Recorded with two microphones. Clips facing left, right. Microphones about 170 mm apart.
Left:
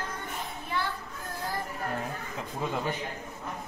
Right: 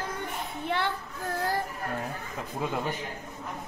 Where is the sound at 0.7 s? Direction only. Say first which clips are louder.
Right 4 dB; 70° right (ahead or behind).